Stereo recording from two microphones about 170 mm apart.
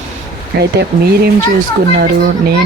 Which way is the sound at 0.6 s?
80° right.